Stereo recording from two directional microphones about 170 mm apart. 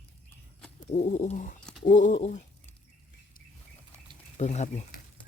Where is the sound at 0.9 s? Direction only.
45° left (ahead or behind).